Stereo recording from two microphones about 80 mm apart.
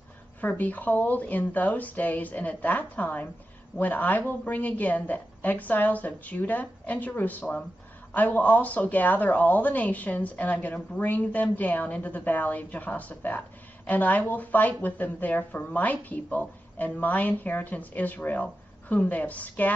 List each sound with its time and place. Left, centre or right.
0.4 s speech: left